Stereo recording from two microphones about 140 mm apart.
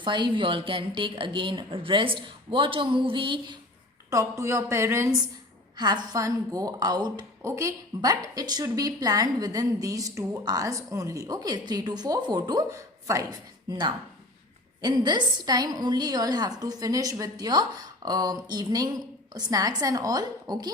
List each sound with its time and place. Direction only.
0.0 s a woman's voice: 35° right (ahead or behind)
4.1 s a woman's voice: 20° right (ahead or behind)
5.7 s a woman's voice: 30° right (ahead or behind)